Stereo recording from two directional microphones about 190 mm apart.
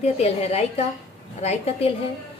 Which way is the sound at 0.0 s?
35° left (ahead or behind).